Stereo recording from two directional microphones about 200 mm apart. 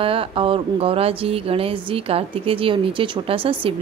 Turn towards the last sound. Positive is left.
turn(degrees=-25)  # may be behind; listen again after turning